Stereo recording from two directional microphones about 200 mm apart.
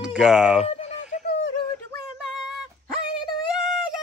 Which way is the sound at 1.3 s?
55° left (ahead or behind).